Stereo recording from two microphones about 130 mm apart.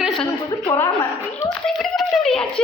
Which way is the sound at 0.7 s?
20° left (ahead or behind).